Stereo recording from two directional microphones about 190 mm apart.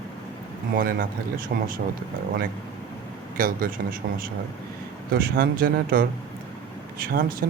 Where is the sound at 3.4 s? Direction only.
50° right (ahead or behind).